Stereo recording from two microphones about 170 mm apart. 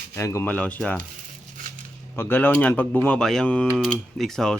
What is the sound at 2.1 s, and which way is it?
Speech, 10° left (ahead or behind).